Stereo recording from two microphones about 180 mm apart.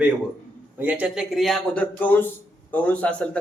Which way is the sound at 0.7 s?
10° right (ahead or behind).